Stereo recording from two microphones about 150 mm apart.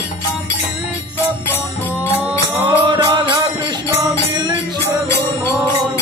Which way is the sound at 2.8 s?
30° right (ahead or behind).